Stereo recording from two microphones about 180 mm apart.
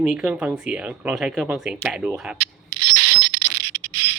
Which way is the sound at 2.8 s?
60° right (ahead or behind).